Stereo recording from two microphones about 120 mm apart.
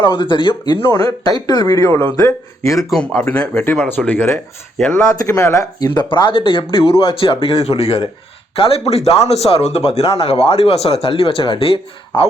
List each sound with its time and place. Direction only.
0.0 s speech: 45° left (ahead or behind); by 2.7 s 25° left (ahead or behind)
2.7 s speech: centre (ahead or behind)
5.1 s speech: 30° left (ahead or behind)
6.0 s speech: 40° left (ahead or behind)